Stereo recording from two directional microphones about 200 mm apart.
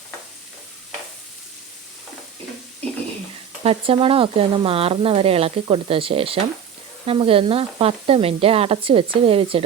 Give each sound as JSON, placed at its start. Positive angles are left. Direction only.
{"t": 3.6, "sound": "speech", "side_deg": -30}